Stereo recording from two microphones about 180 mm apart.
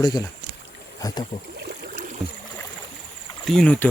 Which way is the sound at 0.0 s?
20° left (ahead or behind).